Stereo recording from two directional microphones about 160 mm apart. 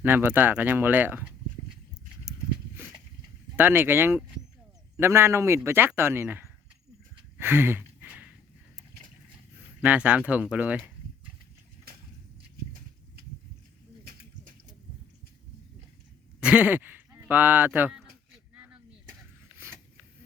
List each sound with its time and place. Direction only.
0.0 s speech: 10° right (ahead or behind)
3.5 s speech: 10° right (ahead or behind)
7.3 s a sound: 15° right (ahead or behind)
9.8 s speech: 10° right (ahead or behind)
16.4 s speech: 10° right (ahead or behind)
18.5 s artillery fire: 10° right (ahead or behind)